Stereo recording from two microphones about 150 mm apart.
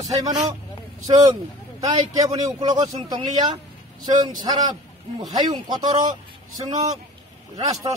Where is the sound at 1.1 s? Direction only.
25° right (ahead or behind).